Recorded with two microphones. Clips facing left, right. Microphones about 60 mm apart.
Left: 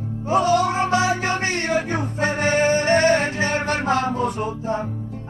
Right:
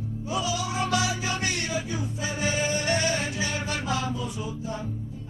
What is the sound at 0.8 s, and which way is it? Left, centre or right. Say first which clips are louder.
Music: left 7 dB; left.